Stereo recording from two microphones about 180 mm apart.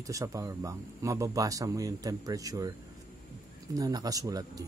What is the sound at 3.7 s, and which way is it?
Speech, 20° right (ahead or behind).